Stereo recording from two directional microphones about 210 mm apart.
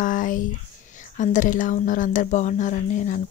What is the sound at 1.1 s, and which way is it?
Speech, 35° left (ahead or behind).